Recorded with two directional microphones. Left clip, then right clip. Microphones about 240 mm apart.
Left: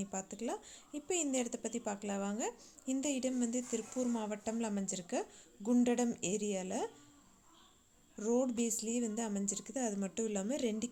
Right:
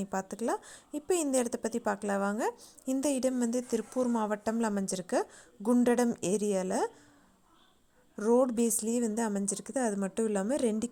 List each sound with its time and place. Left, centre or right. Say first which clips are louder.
0.0 s a woman's voice: right 8 dB; right
8.1 s a woman's voice: right 8 dB; right